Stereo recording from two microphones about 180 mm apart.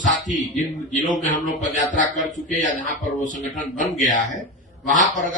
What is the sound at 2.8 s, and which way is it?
A man's voice, 45° left (ahead or behind).